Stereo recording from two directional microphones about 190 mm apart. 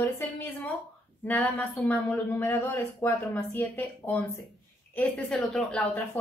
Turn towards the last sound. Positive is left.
turn(degrees=0)  # may be behind; listen again after turning